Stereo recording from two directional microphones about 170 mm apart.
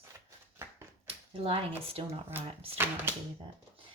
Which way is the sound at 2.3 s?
10° right (ahead or behind).